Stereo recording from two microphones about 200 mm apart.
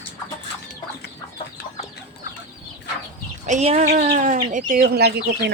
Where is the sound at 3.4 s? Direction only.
35° right (ahead or behind); by 5.5 s 55° right (ahead or behind).